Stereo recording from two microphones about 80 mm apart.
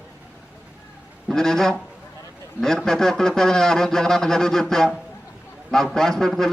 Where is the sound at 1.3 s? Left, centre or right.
Centre.